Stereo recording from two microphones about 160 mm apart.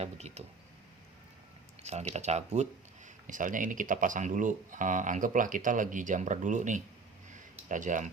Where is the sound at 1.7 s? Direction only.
45° right (ahead or behind).